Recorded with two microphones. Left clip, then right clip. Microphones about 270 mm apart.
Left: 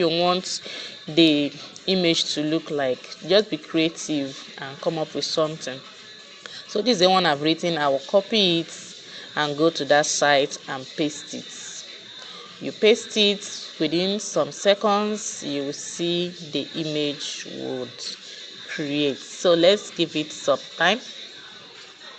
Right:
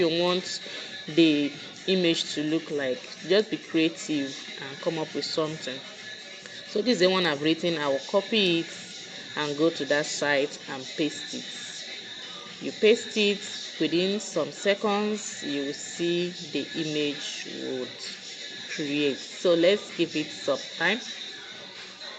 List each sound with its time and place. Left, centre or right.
0.0 s speech: left
5.2 s speech: left
6.7 s speech: left
12.6 s speech: left
18.7 s speech: left